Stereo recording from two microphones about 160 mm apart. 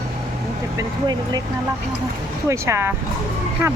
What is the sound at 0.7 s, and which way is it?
Speech, 25° right (ahead or behind).